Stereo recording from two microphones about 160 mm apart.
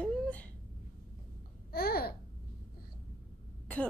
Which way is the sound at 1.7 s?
70° left (ahead or behind).